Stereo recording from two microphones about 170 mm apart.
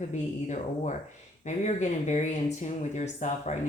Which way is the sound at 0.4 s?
45° left (ahead or behind).